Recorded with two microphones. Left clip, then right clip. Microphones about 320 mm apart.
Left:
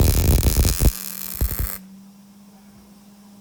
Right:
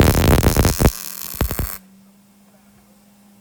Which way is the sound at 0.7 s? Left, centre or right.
Centre.